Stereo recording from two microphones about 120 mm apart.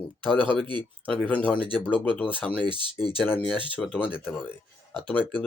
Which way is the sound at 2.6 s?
40° right (ahead or behind).